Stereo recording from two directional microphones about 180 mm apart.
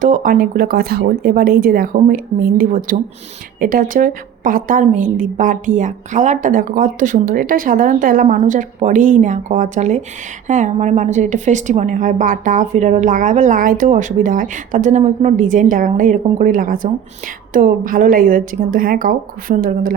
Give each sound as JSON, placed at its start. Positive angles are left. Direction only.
{"t": 0.0, "sound": "a woman's voice", "side_deg": -50}